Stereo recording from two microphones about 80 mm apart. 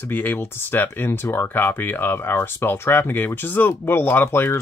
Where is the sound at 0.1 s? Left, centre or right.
Left.